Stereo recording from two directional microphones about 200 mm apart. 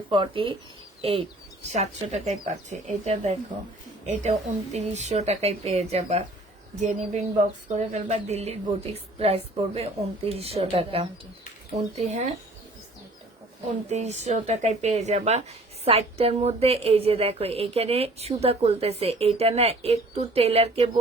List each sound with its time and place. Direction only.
0.1 s speech: 25° right (ahead or behind)
1.7 s speech: 35° right (ahead or behind)
13.9 s speech: 35° right (ahead or behind)